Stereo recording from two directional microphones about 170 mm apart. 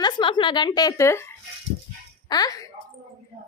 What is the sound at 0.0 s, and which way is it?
A woman's voice, 25° left (ahead or behind).